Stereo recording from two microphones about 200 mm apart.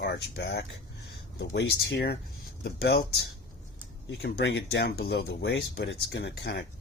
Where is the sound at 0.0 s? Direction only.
55° left (ahead or behind).